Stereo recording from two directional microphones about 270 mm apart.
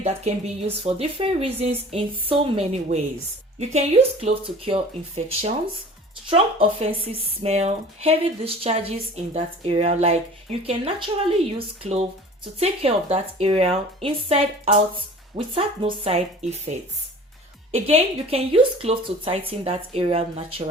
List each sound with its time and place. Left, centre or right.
0.0 s speech: right